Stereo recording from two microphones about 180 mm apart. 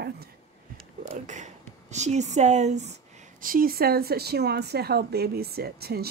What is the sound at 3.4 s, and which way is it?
Speech, 55° right (ahead or behind).